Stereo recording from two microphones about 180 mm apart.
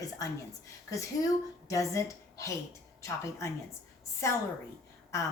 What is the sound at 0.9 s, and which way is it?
A woman's voice, 15° left (ahead or behind).